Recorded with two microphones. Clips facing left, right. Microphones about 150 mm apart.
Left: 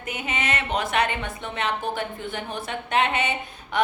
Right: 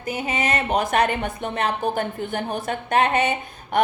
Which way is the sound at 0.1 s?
35° right (ahead or behind).